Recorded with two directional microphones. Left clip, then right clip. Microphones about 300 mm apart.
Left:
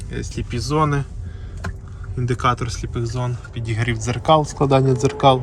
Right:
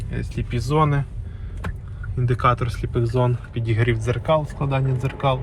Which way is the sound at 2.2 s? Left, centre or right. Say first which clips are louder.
Even; centre.